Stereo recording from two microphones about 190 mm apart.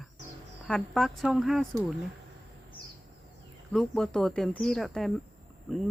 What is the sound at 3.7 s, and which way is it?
Speech, centre (ahead or behind).